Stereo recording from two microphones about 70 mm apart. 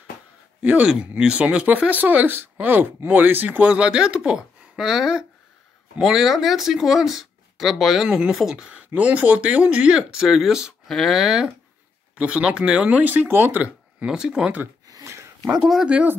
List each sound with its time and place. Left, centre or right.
0.6 s speech: right
0.8 s speech: centre; by 13.6 s right
14.0 s speech: centre
15.0 s a sound: right
15.5 s speech: centre